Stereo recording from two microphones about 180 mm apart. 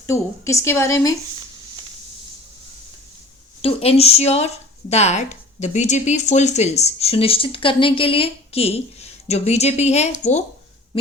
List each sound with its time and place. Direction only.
0.1 s a woman's voice: 15° left (ahead or behind)
3.6 s speech: 35° left (ahead or behind)